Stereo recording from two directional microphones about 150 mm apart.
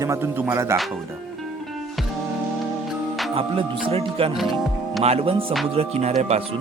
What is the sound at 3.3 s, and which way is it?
Speech, 35° right (ahead or behind).